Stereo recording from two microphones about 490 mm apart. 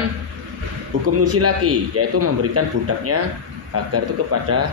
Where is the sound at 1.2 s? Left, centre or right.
Right.